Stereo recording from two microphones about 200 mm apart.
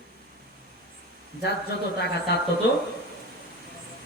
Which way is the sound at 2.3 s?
55° left (ahead or behind).